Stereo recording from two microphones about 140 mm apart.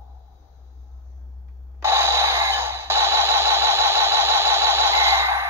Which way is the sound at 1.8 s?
20° right (ahead or behind).